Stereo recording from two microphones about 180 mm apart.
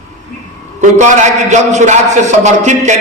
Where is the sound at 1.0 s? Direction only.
40° right (ahead or behind).